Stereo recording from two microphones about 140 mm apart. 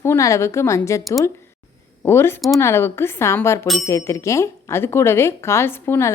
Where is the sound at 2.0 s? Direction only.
15° left (ahead or behind).